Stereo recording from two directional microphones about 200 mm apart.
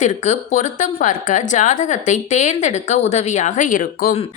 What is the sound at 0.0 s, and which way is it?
A woman's voice, 35° left (ahead or behind).